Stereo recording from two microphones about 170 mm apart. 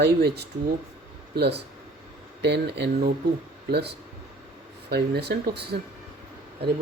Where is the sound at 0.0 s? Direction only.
75° right (ahead or behind).